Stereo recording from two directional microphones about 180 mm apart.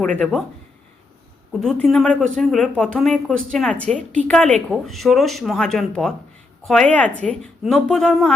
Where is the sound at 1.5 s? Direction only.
Centre (ahead or behind).